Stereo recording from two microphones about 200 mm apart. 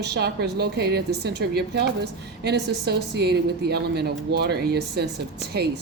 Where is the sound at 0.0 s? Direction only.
55° right (ahead or behind).